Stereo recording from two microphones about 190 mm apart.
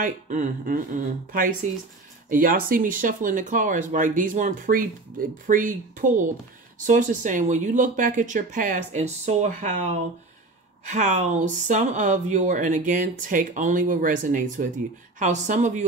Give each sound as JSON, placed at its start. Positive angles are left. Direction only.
{"t": 0.0, "sound": "speech", "side_deg": -45}